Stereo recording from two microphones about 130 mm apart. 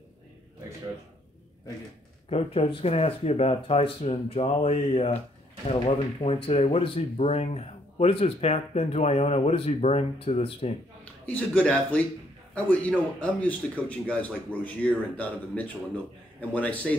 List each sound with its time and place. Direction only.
2.2 s speech: 50° left (ahead or behind)
11.2 s a man's voice: 10° left (ahead or behind)